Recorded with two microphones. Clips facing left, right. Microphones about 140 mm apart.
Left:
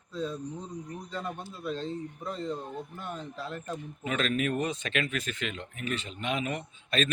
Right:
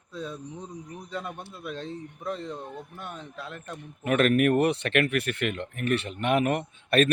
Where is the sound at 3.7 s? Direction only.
60° right (ahead or behind).